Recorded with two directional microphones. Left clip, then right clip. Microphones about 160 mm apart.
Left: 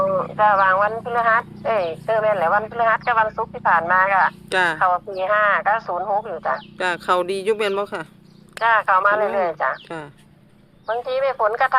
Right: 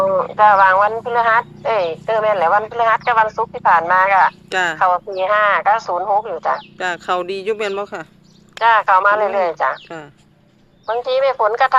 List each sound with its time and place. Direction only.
0.1 s speech: 30° right (ahead or behind)
4.4 s speech: 5° left (ahead or behind)
4.8 s speech: 30° right (ahead or behind)
6.7 s speech: 5° left (ahead or behind)
8.6 s speech: 30° right (ahead or behind)
10.8 s speech: 25° right (ahead or behind)